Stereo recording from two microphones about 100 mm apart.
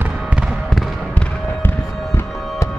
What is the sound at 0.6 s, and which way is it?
Fireworks, centre (ahead or behind).